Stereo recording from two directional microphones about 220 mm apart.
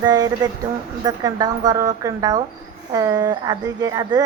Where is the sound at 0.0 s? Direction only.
15° right (ahead or behind).